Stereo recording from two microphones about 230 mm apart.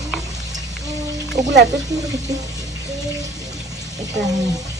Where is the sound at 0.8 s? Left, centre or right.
Centre.